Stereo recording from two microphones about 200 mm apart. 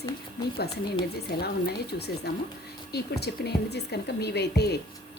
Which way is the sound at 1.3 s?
50° left (ahead or behind).